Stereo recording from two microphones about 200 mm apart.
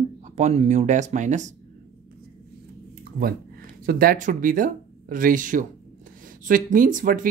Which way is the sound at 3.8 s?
45° right (ahead or behind).